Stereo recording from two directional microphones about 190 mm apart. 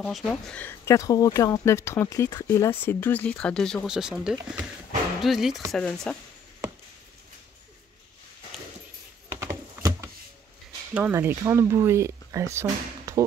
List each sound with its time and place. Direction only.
0.0 s speech: 5° left (ahead or behind)
9.3 s typing: 15° right (ahead or behind)
11.0 s speech: 10° right (ahead or behind)